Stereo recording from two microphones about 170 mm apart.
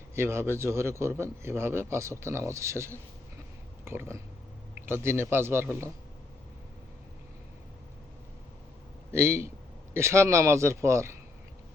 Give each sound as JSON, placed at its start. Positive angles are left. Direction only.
{"t": 0.1, "sound": "speech", "side_deg": -15}
{"t": 9.1, "sound": "speech", "side_deg": -15}